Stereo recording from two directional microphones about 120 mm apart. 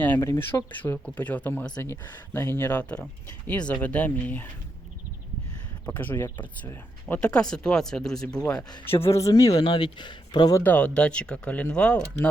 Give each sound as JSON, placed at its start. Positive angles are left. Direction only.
{"t": 0.0, "sound": "speech", "side_deg": 15}
{"t": 6.0, "sound": "speech", "side_deg": 15}
{"t": 9.0, "sound": "speech", "side_deg": 25}
{"t": 10.6, "sound": "speech", "side_deg": 15}